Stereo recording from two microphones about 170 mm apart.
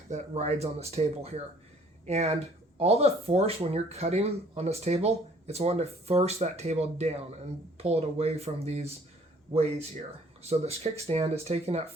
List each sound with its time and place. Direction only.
0.1 s speech: 40° right (ahead or behind)
10.4 s speech: 40° right (ahead or behind)